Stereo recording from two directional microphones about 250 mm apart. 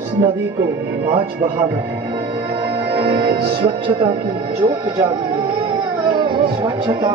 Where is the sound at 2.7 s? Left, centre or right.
Centre.